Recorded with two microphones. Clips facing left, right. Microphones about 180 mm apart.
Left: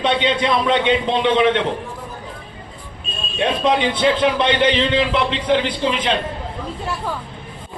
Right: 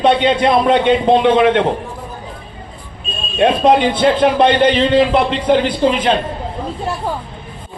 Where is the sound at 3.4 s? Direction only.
45° right (ahead or behind).